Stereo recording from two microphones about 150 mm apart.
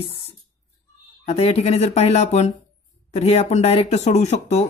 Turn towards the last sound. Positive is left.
turn(degrees=50)  # may be behind; listen again after turning